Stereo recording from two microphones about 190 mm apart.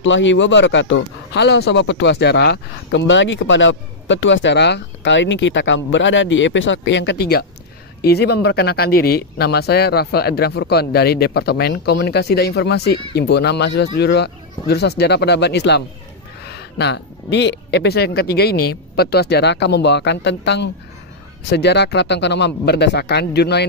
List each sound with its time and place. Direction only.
0.0 s speech: 75° left (ahead or behind); by 23.7 s 60° left (ahead or behind)